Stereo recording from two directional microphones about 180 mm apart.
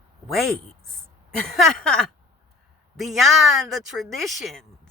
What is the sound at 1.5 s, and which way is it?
Speech, centre (ahead or behind).